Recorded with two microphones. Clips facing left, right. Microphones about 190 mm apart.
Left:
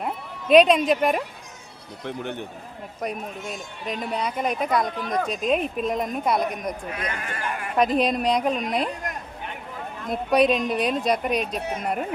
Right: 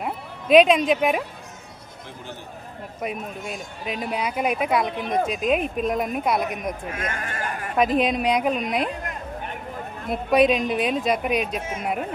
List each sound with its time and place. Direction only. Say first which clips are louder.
0.0 s speech: even; centre (ahead or behind)
3.0 s speech: even; 5° right (ahead or behind)
4.9 s speech: right 2 dB; 25° right (ahead or behind)
5.2 s speech: even; 5° right (ahead or behind)
6.9 s speech: right 1 dB; 45° right (ahead or behind)
7.8 s speech: right 1 dB; centre (ahead or behind)
10.1 s speech: right 1 dB; centre (ahead or behind)